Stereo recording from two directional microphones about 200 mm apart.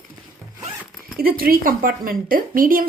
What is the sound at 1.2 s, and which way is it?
A woman's voice, 45° right (ahead or behind).